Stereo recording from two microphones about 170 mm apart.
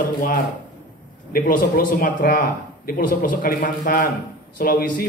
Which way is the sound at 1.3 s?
60° left (ahead or behind).